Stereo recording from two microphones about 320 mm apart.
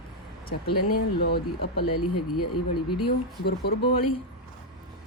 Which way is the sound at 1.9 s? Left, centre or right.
Left.